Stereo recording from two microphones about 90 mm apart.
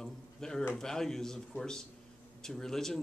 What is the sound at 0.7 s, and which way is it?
Speech, 5° left (ahead or behind).